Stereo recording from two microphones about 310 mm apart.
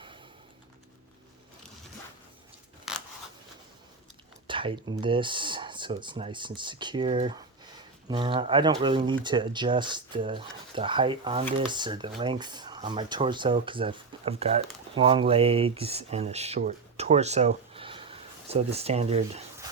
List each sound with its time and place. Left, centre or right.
2.9 s scissors: centre
4.4 s speech: centre